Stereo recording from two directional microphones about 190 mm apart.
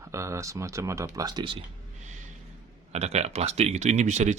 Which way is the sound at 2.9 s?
35° right (ahead or behind).